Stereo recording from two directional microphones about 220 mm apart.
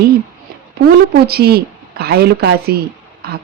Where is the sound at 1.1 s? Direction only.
45° right (ahead or behind).